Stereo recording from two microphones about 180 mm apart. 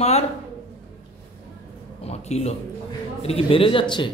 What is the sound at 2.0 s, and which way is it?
A man's voice, 35° left (ahead or behind).